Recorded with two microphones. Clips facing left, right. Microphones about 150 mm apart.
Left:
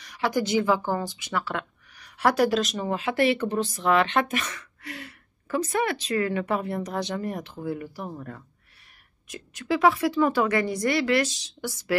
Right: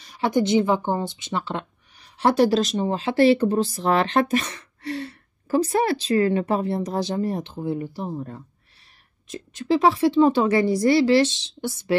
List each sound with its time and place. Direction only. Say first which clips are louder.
0.0 s speech: right 4 dB; 25° right (ahead or behind)